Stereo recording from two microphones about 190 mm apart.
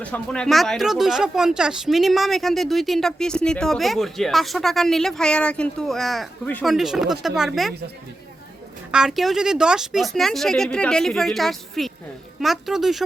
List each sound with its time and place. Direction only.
0.0 s speech: 5° left (ahead or behind)
8.9 s speech: 5° right (ahead or behind)